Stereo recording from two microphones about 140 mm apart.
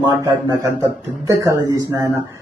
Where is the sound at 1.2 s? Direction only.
25° right (ahead or behind).